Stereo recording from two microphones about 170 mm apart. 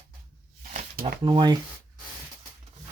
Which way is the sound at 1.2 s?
25° right (ahead or behind).